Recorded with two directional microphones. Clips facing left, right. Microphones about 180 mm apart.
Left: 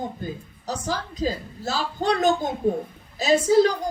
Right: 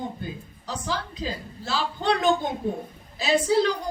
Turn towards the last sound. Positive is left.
turn(degrees=45)  # may be behind; listen again after turning